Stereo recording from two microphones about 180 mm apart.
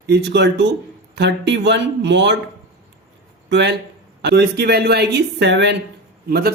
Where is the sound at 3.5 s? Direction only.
75° right (ahead or behind).